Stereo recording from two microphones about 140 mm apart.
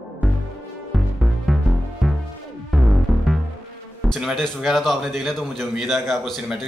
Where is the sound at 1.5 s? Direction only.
Centre (ahead or behind).